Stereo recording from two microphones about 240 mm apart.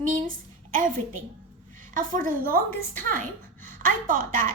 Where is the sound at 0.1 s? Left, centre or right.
Right.